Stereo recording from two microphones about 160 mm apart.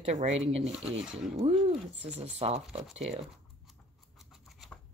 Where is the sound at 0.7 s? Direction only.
Centre (ahead or behind).